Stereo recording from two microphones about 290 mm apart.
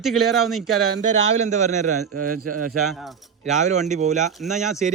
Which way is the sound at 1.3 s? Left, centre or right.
Right.